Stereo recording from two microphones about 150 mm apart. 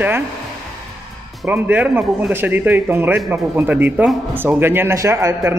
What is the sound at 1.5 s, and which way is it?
Speech, 10° right (ahead or behind).